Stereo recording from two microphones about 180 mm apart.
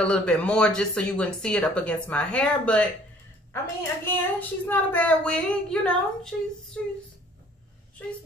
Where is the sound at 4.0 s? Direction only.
10° left (ahead or behind).